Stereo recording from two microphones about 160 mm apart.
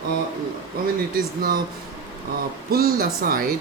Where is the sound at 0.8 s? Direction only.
70° right (ahead or behind).